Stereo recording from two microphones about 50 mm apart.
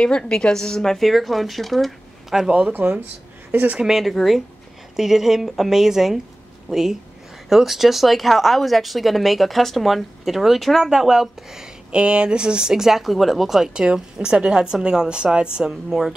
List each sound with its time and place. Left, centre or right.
0.2 s speech: centre
2.3 s a woman's voice: centre
2.7 s speech: right
3.8 s a woman's voice: centre
13.8 s a woman's voice: centre